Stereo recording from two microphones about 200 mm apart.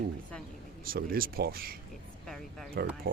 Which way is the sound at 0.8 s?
45° right (ahead or behind).